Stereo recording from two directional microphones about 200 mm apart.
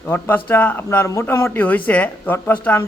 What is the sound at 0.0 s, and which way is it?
A man's voice, 10° left (ahead or behind).